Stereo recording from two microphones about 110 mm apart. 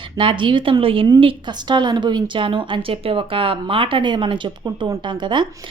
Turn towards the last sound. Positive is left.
turn(degrees=-45)  # may be behind; listen again after turning